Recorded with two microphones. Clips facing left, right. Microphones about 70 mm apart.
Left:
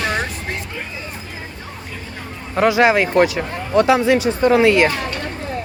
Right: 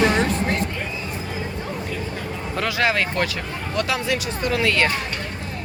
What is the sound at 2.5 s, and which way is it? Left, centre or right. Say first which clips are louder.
Speech: left 8 dB; left.